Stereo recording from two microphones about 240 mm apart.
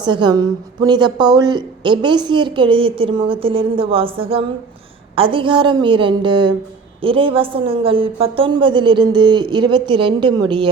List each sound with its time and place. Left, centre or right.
0.0 s a woman's voice: centre